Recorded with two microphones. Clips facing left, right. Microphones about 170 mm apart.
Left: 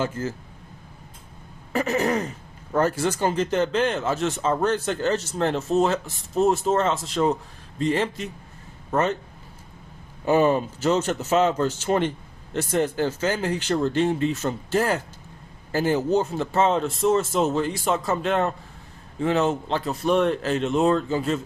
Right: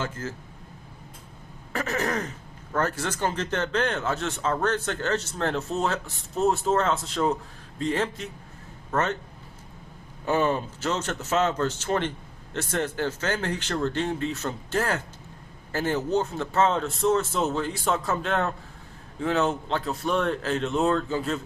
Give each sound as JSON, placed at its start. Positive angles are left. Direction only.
{"t": 0.0, "sound": "speech", "side_deg": 10}
{"t": 1.7, "sound": "speech", "side_deg": 10}
{"t": 5.7, "sound": "speech", "side_deg": 30}
{"t": 7.2, "sound": "a man's voice", "side_deg": 10}
{"t": 10.2, "sound": "a man's voice", "side_deg": 10}